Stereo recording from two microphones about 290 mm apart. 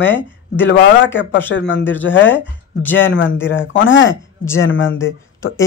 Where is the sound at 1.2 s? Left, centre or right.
Left.